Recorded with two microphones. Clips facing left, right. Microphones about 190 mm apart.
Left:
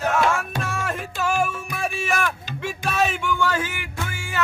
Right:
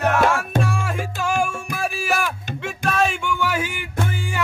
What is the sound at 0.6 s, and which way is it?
Music, centre (ahead or behind).